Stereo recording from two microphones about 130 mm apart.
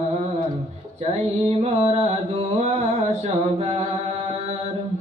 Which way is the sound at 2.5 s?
55° right (ahead or behind).